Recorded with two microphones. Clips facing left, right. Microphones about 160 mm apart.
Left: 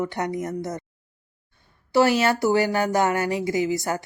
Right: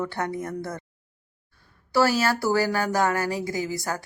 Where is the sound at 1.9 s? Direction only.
20° left (ahead or behind).